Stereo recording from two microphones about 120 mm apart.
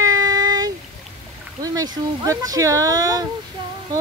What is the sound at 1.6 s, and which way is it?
Speech, 35° right (ahead or behind).